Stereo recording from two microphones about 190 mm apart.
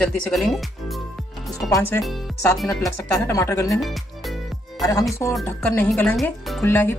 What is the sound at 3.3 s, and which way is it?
Speech, 15° left (ahead or behind).